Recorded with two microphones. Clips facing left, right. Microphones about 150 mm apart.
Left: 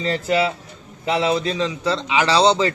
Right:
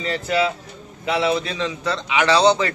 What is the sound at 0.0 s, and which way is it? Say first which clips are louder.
A man's voice: left 1 dB; 35° left (ahead or behind).